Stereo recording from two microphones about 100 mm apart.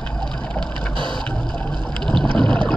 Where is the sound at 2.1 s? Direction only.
5° left (ahead or behind).